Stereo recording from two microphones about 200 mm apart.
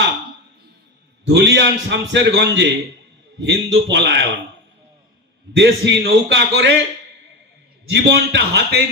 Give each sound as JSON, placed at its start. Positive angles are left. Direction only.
{"t": 1.3, "sound": "a man's voice", "side_deg": -60}
{"t": 5.5, "sound": "a man's voice", "side_deg": -60}
{"t": 7.9, "sound": "a man's voice", "side_deg": -55}